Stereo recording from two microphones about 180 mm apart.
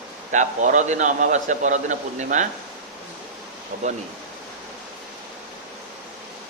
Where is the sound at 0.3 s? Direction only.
45° right (ahead or behind).